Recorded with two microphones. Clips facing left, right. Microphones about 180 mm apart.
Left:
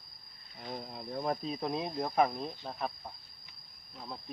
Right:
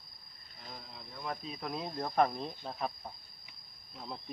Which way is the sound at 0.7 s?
50° left (ahead or behind).